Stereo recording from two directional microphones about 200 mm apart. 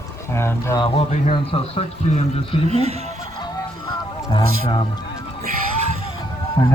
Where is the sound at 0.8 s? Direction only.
30° left (ahead or behind).